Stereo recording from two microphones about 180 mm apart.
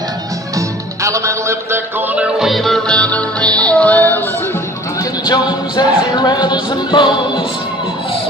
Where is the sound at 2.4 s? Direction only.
Centre (ahead or behind).